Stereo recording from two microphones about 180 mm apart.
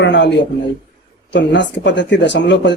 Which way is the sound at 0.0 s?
75° left (ahead or behind).